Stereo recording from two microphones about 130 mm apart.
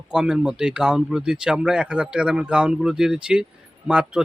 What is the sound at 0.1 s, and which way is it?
Speech, 5° right (ahead or behind).